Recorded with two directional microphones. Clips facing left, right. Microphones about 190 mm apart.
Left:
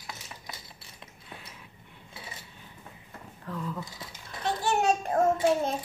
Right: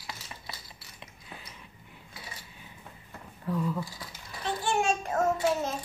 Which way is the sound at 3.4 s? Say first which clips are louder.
Right 5 dB; 10° right (ahead or behind).